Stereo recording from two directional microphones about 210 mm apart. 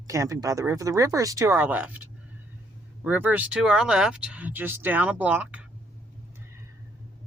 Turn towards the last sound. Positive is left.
turn(degrees=-5)  # may be behind; listen again after turning